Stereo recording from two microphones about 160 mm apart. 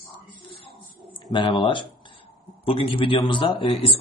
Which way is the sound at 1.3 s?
30° left (ahead or behind).